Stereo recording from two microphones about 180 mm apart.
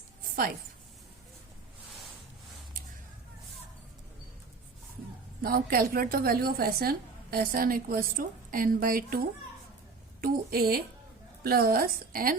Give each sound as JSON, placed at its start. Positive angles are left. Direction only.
{"t": 5.4, "sound": "a woman's voice", "side_deg": -55}